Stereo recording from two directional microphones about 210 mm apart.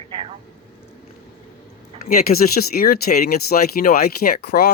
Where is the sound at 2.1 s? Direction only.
45° left (ahead or behind).